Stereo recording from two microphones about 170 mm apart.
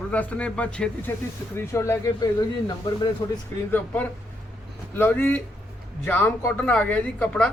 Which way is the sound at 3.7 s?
10° left (ahead or behind).